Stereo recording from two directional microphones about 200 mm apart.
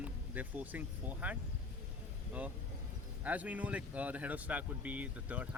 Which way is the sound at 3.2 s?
5° right (ahead or behind).